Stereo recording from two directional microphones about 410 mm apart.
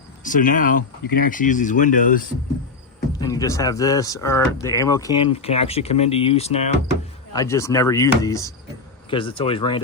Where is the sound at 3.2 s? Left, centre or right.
Centre.